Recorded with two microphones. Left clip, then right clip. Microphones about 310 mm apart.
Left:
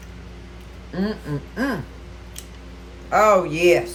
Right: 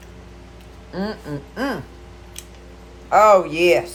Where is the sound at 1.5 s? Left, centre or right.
Centre.